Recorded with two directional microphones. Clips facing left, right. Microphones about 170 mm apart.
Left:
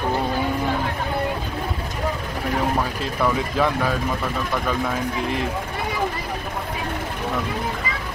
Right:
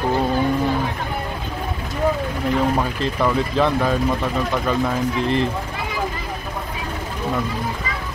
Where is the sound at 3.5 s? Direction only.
10° left (ahead or behind).